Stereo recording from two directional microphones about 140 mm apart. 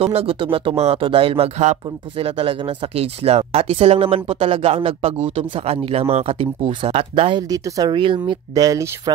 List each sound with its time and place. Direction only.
0.0 s speech: 45° right (ahead or behind)
7.4 s speech: 25° right (ahead or behind)